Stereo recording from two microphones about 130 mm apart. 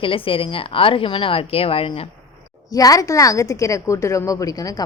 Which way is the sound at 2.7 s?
25° left (ahead or behind).